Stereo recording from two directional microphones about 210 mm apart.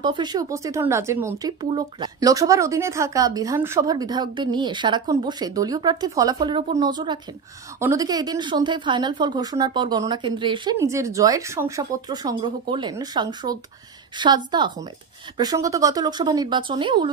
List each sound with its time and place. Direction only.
0.0 s a woman's voice: 20° right (ahead or behind)